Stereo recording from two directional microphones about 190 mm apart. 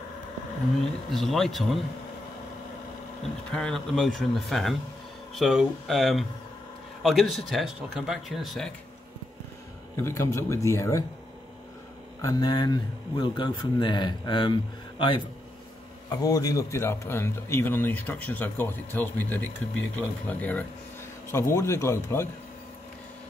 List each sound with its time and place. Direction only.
1.1 s speech: centre (ahead or behind)
3.5 s speech: 5° left (ahead or behind)
10.0 s speech: 15° left (ahead or behind)
12.2 s speech: 20° left (ahead or behind)